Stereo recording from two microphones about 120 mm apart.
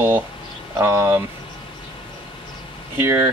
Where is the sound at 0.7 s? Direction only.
20° right (ahead or behind).